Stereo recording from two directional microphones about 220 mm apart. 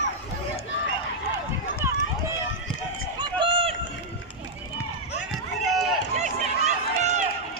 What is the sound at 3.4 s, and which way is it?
Run, 25° right (ahead or behind).